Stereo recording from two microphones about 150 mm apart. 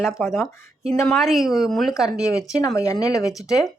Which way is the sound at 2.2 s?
20° left (ahead or behind).